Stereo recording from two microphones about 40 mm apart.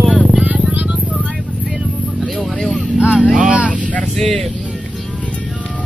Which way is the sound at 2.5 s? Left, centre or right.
Centre.